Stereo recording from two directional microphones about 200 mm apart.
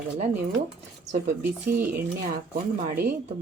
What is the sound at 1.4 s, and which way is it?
Speech, 10° right (ahead or behind).